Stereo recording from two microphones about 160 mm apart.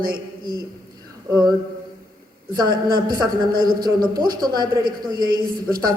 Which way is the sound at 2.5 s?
25° right (ahead or behind).